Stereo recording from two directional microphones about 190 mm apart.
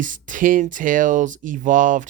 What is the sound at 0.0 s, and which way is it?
Speech, 45° right (ahead or behind).